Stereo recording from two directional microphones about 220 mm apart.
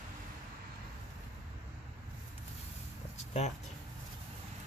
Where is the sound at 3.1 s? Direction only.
30° left (ahead or behind).